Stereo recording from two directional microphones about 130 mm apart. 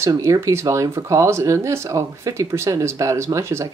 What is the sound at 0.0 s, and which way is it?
Speech, 25° right (ahead or behind).